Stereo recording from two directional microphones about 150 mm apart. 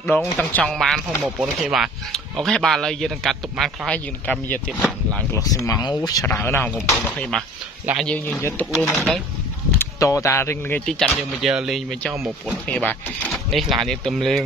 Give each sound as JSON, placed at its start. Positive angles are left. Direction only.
{"t": 0.1, "sound": "speech", "side_deg": 15}
{"t": 5.3, "sound": "speech", "side_deg": 25}
{"t": 8.4, "sound": "speech", "side_deg": 20}
{"t": 8.9, "sound": "speech", "side_deg": 5}
{"t": 9.8, "sound": "speech", "side_deg": 20}